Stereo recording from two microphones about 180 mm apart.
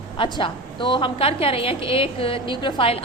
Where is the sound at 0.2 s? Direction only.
25° left (ahead or behind).